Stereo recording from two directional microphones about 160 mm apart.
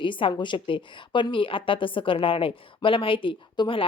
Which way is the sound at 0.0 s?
30° left (ahead or behind).